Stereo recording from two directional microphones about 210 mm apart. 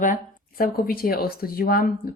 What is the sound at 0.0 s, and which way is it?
A woman's voice, 40° left (ahead or behind).